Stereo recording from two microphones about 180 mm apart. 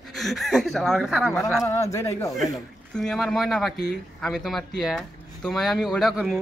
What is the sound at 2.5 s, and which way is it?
Speech, centre (ahead or behind).